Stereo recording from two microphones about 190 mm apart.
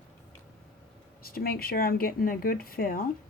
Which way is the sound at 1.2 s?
50° left (ahead or behind).